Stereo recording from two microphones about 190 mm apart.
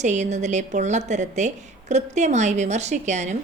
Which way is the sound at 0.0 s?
40° right (ahead or behind).